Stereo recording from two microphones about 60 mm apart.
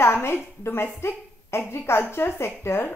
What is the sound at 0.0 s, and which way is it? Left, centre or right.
A woman's voice, left.